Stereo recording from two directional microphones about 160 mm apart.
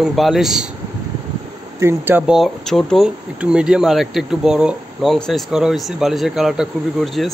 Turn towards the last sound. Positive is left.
turn(degrees=0)  # may be behind; listen again after turning